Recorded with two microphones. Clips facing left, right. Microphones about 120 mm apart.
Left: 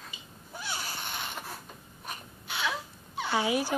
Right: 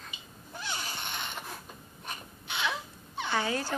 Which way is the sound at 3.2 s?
10° left (ahead or behind).